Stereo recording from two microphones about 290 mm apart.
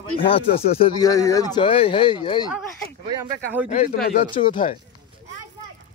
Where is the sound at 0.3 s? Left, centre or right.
Centre.